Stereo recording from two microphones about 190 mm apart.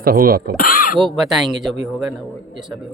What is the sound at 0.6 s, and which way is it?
Speech, 50° left (ahead or behind).